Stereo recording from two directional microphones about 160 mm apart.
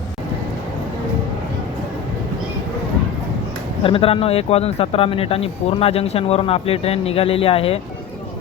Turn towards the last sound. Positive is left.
turn(degrees=35)  # may be behind; listen again after turning